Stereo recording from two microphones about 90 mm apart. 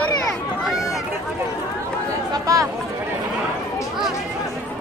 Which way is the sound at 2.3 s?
40° right (ahead or behind).